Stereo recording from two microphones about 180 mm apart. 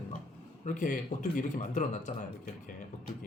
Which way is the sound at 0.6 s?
45° left (ahead or behind).